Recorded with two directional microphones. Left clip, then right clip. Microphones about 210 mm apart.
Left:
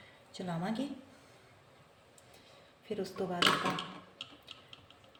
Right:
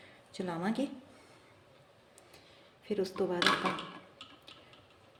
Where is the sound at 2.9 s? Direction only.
55° right (ahead or behind).